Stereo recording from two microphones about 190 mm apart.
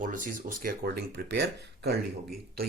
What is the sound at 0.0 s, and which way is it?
Speech, 45° right (ahead or behind).